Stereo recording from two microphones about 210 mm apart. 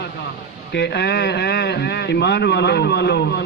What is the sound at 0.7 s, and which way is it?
A man's voice, 55° left (ahead or behind).